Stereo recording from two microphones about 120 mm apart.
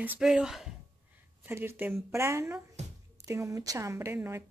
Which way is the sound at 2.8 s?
70° right (ahead or behind).